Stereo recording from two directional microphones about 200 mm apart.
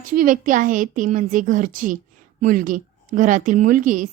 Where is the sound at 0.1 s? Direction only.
45° right (ahead or behind).